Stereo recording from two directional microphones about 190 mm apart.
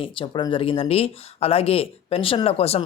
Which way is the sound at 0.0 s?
25° left (ahead or behind).